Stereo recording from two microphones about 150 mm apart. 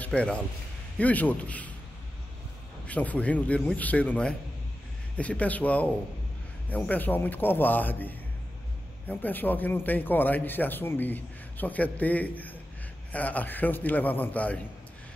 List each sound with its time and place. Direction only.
0.0 s a man's voice: 10° left (ahead or behind)
2.9 s a man's voice: 10° left (ahead or behind)